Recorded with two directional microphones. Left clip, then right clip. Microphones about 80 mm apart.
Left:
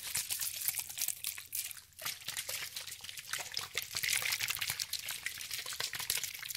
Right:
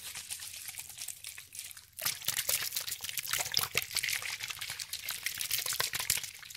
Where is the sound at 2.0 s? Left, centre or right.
Right.